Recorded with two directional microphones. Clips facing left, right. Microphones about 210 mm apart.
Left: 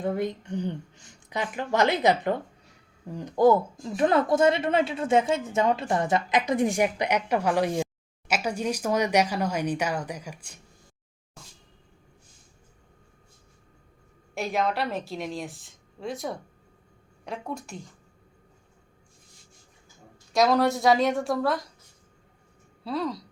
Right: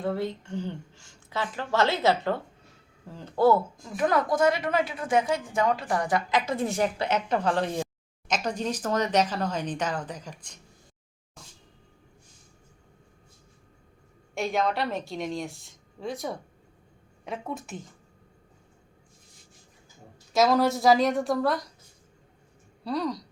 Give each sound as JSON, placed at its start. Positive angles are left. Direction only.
{"t": 0.0, "sound": "a woman's voice", "side_deg": 15}
{"t": 3.9, "sound": "a woman's voice", "side_deg": 25}
{"t": 14.3, "sound": "a woman's voice", "side_deg": 0}
{"t": 20.3, "sound": "a woman's voice", "side_deg": 0}
{"t": 22.8, "sound": "a woman's voice", "side_deg": 0}